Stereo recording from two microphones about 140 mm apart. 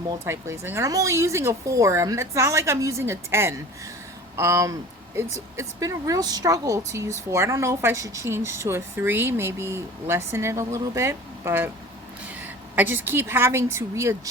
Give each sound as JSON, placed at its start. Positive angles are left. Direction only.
{"t": 0.1, "sound": "a woman's voice", "side_deg": -20}